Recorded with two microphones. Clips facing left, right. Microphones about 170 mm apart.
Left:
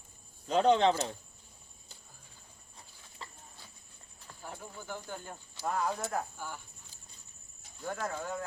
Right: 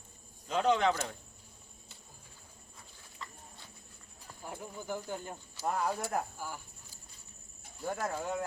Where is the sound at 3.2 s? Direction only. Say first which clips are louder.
Right 1 dB; 30° left (ahead or behind).